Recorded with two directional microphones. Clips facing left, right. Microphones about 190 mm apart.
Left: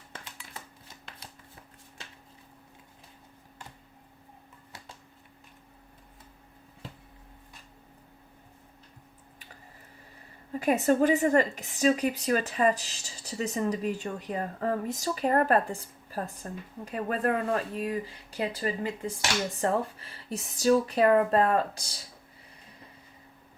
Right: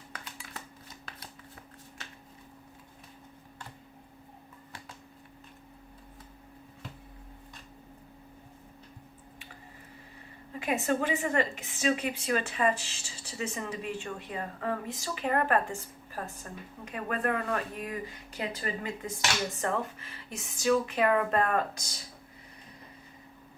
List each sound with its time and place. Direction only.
10.6 s speech: 40° left (ahead or behind)